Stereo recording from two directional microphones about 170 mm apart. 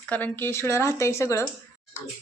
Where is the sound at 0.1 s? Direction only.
10° left (ahead or behind).